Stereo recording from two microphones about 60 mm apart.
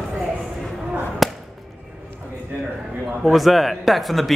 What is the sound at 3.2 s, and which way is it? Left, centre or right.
Speech, centre.